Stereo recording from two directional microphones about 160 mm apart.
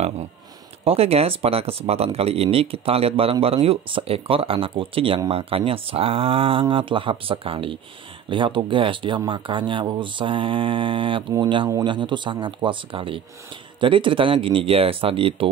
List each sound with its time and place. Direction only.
0.8 s speech: 40° right (ahead or behind)